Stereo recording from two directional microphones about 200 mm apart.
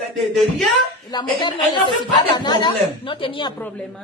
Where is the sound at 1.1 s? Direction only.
20° left (ahead or behind).